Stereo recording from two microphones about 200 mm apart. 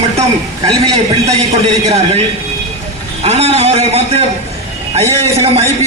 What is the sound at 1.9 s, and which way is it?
Speech, 30° right (ahead or behind).